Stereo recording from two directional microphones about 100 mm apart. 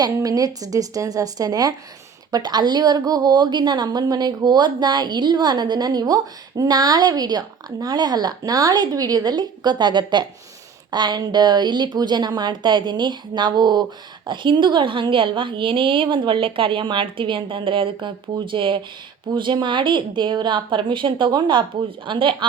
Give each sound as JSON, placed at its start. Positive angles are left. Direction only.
{"t": 0.0, "sound": "a woman's voice", "side_deg": -35}